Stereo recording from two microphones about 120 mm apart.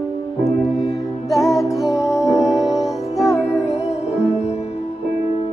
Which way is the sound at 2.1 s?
25° left (ahead or behind).